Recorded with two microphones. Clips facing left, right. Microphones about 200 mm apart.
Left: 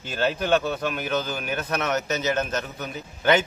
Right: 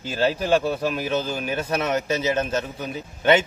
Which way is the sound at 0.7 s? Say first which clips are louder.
Right 3 dB; 5° right (ahead or behind).